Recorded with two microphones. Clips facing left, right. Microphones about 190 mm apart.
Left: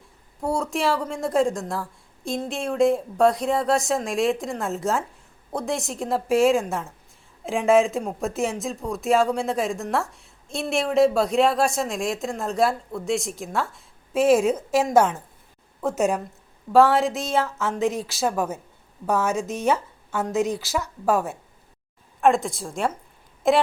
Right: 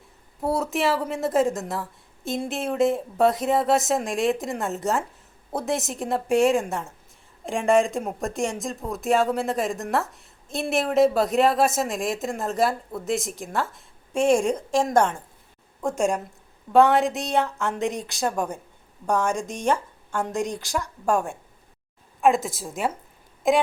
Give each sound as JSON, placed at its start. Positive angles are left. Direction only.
{"t": 0.4, "sound": "speech", "side_deg": -5}